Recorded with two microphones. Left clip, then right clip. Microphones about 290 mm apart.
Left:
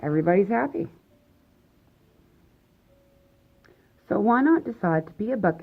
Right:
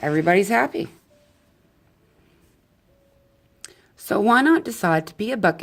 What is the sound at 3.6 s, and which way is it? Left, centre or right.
Speech, right.